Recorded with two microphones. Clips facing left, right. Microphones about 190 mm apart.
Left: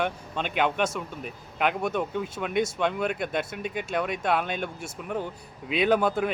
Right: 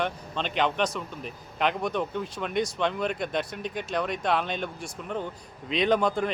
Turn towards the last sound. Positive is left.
turn(degrees=5)  # may be behind; listen again after turning